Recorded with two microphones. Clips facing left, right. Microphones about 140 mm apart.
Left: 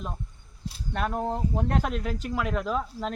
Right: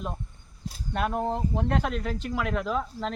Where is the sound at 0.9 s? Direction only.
5° right (ahead or behind).